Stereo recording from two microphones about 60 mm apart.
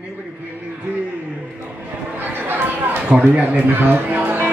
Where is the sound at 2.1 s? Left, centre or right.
Right.